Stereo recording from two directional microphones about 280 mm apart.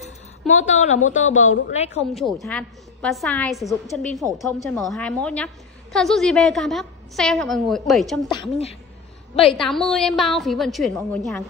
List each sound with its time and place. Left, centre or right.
0.5 s a woman's voice: left
2.4 s a woman's voice: centre
8.3 s a woman's voice: centre
9.5 s a woman's voice: centre